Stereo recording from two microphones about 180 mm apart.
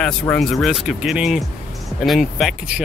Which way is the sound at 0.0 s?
Centre (ahead or behind).